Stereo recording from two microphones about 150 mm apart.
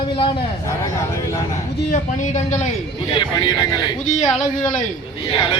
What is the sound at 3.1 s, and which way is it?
Speech, 30° left (ahead or behind).